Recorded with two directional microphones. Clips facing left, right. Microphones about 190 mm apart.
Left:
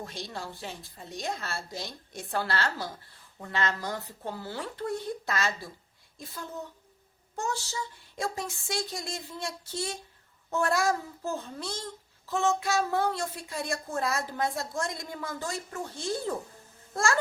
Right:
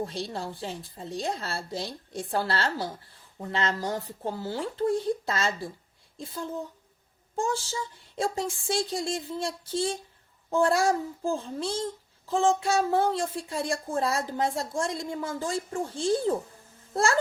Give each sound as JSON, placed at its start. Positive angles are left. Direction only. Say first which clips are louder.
{"t": 0.0, "sound": "a woman's voice", "louder": "right 6 dB", "side_deg": -30}